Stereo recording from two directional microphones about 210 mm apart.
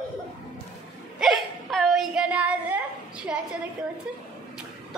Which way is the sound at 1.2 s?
Centre (ahead or behind).